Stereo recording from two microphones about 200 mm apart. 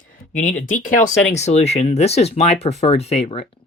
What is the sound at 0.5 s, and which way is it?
Speech, 40° left (ahead or behind).